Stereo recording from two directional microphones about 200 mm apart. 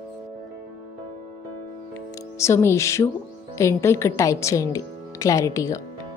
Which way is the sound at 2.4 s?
15° left (ahead or behind).